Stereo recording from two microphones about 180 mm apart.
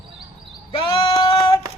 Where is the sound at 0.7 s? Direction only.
30° left (ahead or behind).